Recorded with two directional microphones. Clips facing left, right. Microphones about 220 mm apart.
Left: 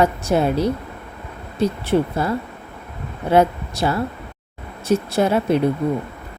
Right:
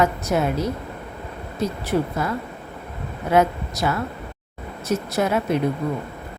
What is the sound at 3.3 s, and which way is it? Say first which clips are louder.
A woman's voice: left 3 dB; 30° left (ahead or behind).